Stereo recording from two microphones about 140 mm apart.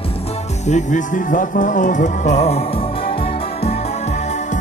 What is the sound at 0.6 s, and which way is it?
Speech, 60° left (ahead or behind).